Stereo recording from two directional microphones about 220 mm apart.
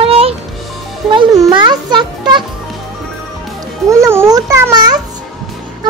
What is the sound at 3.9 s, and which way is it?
A child's voice, 10° right (ahead or behind).